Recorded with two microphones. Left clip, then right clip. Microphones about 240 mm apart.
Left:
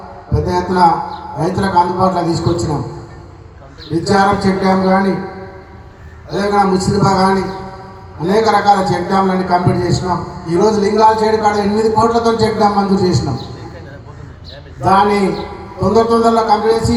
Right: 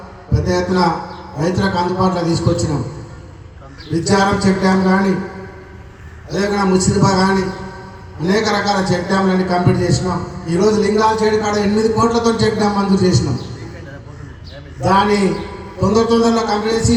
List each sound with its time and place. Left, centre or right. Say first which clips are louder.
0.3 s a man's voice: left 3 dB; right
3.9 s a man's voice: left 3 dB; right
6.5 s a man's voice: left 4 dB; right
14.8 s a man's voice: left 3 dB; right